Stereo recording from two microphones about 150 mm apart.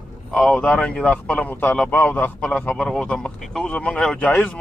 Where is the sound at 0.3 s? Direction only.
5° left (ahead or behind).